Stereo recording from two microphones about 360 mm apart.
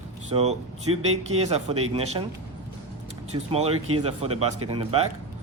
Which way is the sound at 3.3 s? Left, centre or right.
Centre.